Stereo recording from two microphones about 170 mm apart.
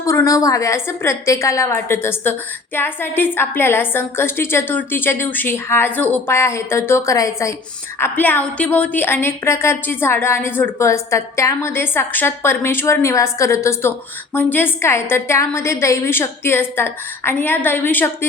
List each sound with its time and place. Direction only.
0.0 s a woman's voice: 20° left (ahead or behind)